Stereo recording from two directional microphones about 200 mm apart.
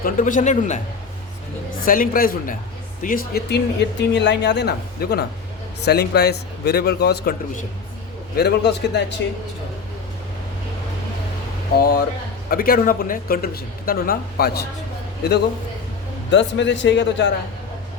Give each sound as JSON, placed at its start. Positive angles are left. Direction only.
{"t": 0.0, "sound": "a man's voice", "side_deg": 40}
{"t": 1.8, "sound": "speech", "side_deg": 45}
{"t": 11.8, "sound": "speech", "side_deg": 50}